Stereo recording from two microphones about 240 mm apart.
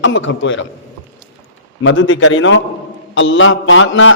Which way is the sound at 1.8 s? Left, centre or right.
Left.